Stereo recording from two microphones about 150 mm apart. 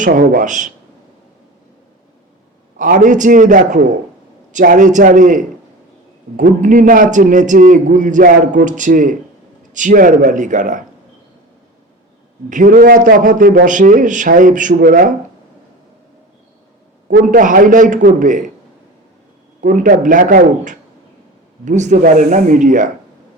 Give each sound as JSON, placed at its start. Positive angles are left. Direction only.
{"t": 0.0, "sound": "a man's voice", "side_deg": -60}
{"t": 2.7, "sound": "a man's voice", "side_deg": -60}
{"t": 12.5, "sound": "a man's voice", "side_deg": -60}
{"t": 17.1, "sound": "a man's voice", "side_deg": -65}
{"t": 19.6, "sound": "a man's voice", "side_deg": -60}